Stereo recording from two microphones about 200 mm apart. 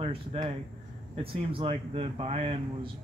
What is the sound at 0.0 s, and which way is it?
Speech, 30° right (ahead or behind).